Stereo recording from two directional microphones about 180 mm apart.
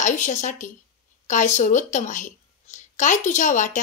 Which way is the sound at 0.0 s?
40° left (ahead or behind).